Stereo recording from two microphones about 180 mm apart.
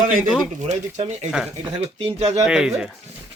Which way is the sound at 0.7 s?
40° right (ahead or behind).